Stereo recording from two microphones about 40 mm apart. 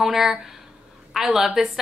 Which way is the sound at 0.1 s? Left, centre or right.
Centre.